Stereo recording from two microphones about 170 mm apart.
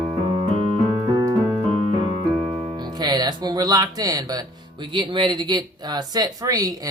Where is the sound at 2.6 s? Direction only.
30° right (ahead or behind).